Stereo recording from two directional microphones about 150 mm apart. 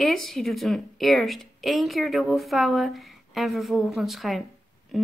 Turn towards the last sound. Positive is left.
turn(degrees=0)  # may be behind; listen again after turning